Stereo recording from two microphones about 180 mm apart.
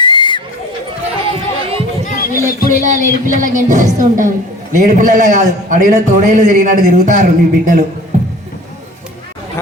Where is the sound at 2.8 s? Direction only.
45° right (ahead or behind).